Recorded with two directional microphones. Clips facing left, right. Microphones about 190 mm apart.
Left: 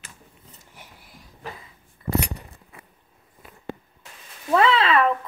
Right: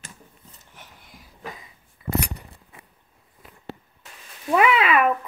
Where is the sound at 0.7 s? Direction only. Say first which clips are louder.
Even; 10° left (ahead or behind).